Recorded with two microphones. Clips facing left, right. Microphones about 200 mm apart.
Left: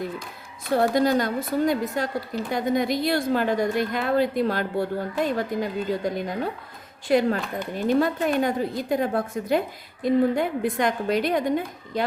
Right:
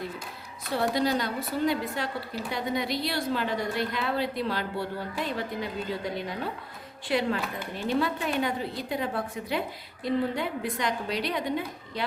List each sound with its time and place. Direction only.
0.7 s a woman's voice: 50° left (ahead or behind)